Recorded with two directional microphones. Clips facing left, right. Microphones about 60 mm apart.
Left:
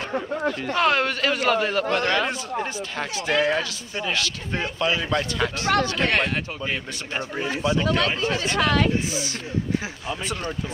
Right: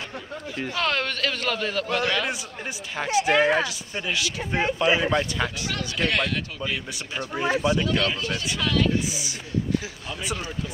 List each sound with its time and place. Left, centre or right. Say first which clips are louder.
0.7 s a man's voice: left 4 dB; centre
3.0 s speech: right 3 dB; centre
5.7 s speech: left 9 dB; left
7.4 s speech: right 3 dB; right
7.7 s speech: left 2 dB; left
8.5 s speech: left 2 dB; left